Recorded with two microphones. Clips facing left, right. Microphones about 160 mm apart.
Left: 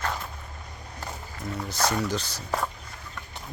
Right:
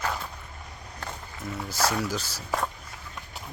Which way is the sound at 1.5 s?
5° right (ahead or behind).